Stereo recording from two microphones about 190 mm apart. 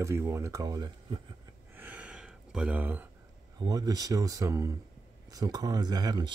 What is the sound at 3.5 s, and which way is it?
Speech, 20° right (ahead or behind).